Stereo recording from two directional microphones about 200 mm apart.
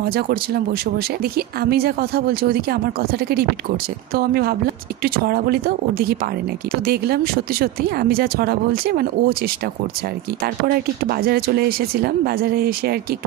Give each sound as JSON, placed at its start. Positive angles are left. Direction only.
{"t": 0.9, "sound": "speech", "side_deg": -50}
{"t": 10.4, "sound": "speech", "side_deg": -50}